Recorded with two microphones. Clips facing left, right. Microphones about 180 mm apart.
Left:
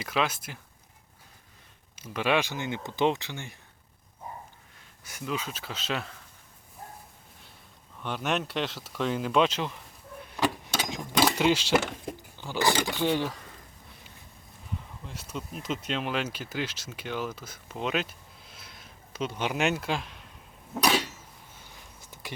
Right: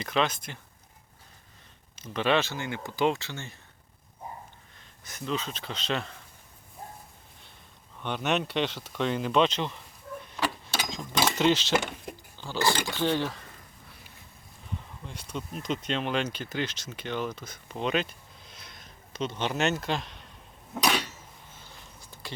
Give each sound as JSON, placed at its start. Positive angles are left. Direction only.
{"t": 0.0, "sound": "speech", "side_deg": 5}
{"t": 2.0, "sound": "speech", "side_deg": 10}
{"t": 5.0, "sound": "speech", "side_deg": 10}
{"t": 8.0, "sound": "speech", "side_deg": 5}
{"t": 10.2, "sound": "a sound", "side_deg": 10}
{"t": 12.4, "sound": "speech", "side_deg": 15}
{"t": 15.0, "sound": "speech", "side_deg": 5}
{"t": 21.7, "sound": "a sound", "side_deg": 15}